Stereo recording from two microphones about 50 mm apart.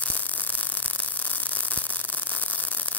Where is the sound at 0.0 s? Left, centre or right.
Left.